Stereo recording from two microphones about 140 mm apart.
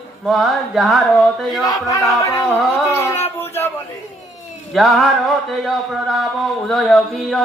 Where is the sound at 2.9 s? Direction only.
20° left (ahead or behind).